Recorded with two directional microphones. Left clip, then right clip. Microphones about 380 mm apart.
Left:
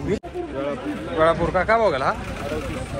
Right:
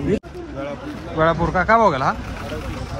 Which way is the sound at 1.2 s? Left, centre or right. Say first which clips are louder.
Right 1 dB; centre.